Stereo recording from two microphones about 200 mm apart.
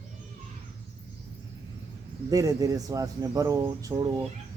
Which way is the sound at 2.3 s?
15° right (ahead or behind).